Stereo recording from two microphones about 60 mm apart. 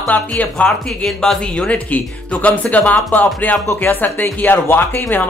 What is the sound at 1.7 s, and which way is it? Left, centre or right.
Speech, left.